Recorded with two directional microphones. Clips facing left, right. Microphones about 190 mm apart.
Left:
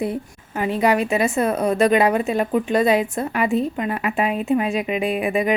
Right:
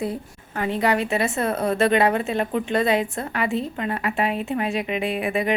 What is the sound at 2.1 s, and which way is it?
A woman's voice, 20° left (ahead or behind).